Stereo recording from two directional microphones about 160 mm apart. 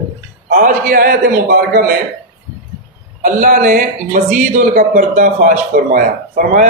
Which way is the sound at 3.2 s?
55° right (ahead or behind).